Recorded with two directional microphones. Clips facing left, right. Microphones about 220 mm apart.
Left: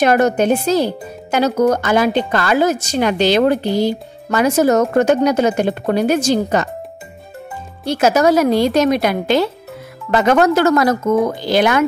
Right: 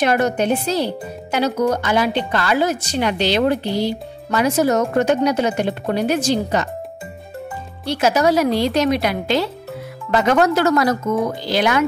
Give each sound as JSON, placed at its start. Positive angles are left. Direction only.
{"t": 0.0, "sound": "speech", "side_deg": 45}
{"t": 7.8, "sound": "speech", "side_deg": 45}